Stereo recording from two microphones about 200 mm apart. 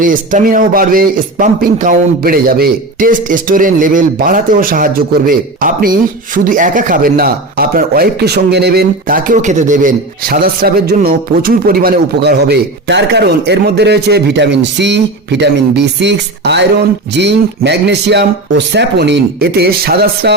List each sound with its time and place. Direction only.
0.0 s a man's voice: 40° right (ahead or behind)